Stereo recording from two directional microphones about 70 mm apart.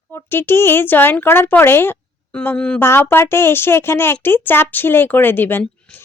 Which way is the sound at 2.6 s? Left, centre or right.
Centre.